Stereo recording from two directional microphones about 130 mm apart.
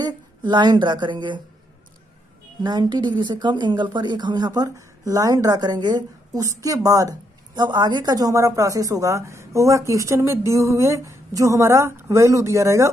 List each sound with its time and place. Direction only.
0.0 s a woman's voice: 35° right (ahead or behind)
2.6 s a woman's voice: 35° right (ahead or behind)